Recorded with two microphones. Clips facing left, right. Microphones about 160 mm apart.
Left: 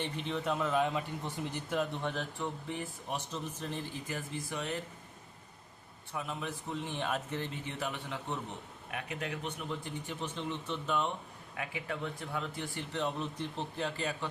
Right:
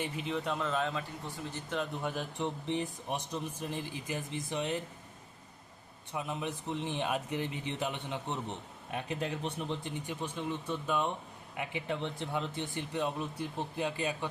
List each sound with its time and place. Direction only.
0.0 s speech: 5° right (ahead or behind); by 1.8 s 15° left (ahead or behind)
1.8 s speech: 5° right (ahead or behind)
2.4 s speech: 20° right (ahead or behind)
6.1 s speech: 20° right (ahead or behind)